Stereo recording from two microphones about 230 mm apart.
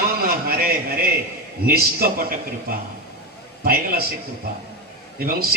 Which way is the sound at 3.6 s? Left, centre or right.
Right.